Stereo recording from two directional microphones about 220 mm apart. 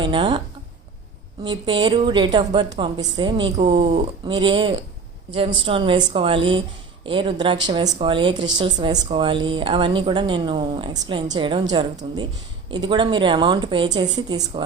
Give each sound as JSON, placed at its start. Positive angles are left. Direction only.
{"t": 0.0, "sound": "speech", "side_deg": -20}
{"t": 1.5, "sound": "speech", "side_deg": -20}